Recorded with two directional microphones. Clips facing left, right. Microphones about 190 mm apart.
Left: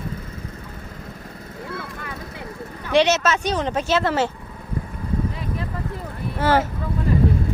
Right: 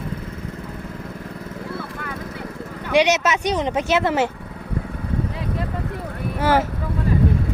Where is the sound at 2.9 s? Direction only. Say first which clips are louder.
Even; 15° right (ahead or behind).